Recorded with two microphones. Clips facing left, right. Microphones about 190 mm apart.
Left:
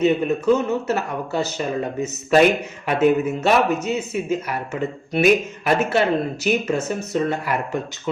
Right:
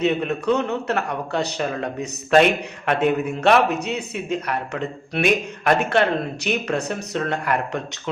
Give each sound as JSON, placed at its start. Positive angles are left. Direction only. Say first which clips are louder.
{"t": 0.0, "sound": "a man's voice", "louder": "left 3 dB", "side_deg": 5}